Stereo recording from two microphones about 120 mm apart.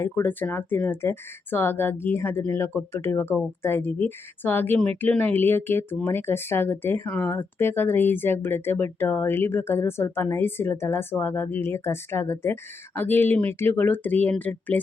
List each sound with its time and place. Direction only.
0.0 s speech: 15° left (ahead or behind)